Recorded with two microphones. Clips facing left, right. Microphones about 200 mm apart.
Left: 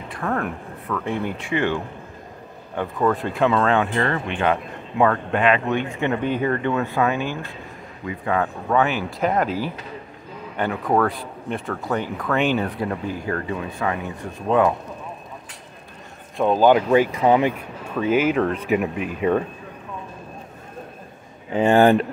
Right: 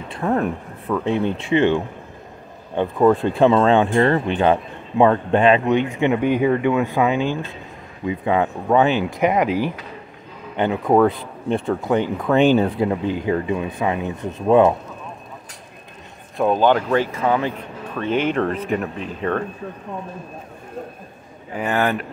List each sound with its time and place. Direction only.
0.1 s speech: 20° right (ahead or behind)
5.7 s speech: 20° right (ahead or behind)
9.3 s speech: 15° right (ahead or behind)
16.3 s speech: 5° left (ahead or behind)
18.8 s speech: 10° left (ahead or behind)
21.5 s speech: 25° left (ahead or behind)